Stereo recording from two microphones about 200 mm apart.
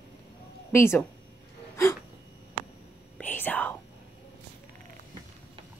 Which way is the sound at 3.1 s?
10° left (ahead or behind).